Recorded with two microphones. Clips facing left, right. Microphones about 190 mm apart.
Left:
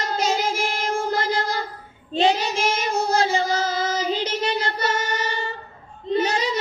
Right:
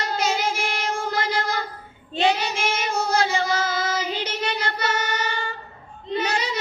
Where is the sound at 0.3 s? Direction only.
40° left (ahead or behind).